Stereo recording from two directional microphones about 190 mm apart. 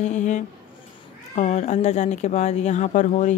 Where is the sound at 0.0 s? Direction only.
40° left (ahead or behind).